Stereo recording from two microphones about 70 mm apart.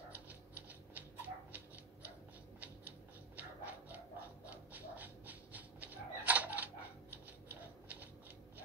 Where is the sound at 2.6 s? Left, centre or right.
Right.